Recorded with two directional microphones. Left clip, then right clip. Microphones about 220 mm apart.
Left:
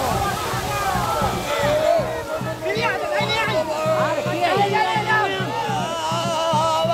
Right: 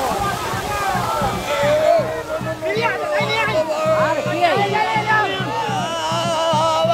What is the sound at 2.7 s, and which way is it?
Music, 45° left (ahead or behind).